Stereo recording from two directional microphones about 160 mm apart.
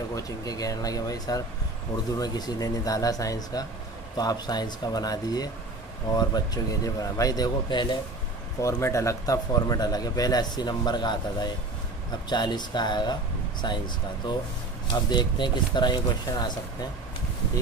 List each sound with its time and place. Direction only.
0.1 s speech: 20° left (ahead or behind)
8.5 s speech: 20° left (ahead or behind)
14.9 s speech: 30° left (ahead or behind)